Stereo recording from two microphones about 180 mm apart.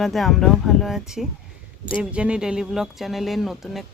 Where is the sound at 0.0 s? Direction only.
Centre (ahead or behind).